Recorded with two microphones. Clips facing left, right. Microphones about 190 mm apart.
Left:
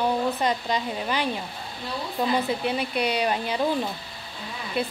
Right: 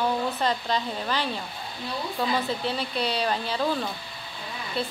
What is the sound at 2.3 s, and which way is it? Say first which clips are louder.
A woman's voice: left 4 dB; 15° left (ahead or behind).